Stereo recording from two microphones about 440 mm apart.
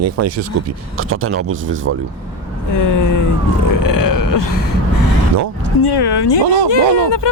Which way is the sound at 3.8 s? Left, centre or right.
Left.